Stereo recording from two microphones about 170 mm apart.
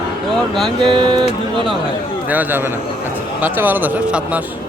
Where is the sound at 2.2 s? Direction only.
10° right (ahead or behind).